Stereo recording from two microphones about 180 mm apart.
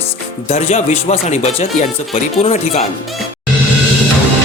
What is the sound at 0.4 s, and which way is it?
Speech, 35° left (ahead or behind).